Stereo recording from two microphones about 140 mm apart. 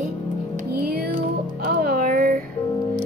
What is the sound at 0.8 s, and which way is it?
Music, 90° right.